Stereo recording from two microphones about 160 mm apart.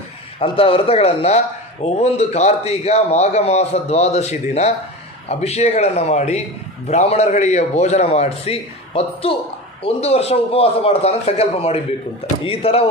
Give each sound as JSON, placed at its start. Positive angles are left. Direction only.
{"t": 0.4, "sound": "a man's voice", "side_deg": 35}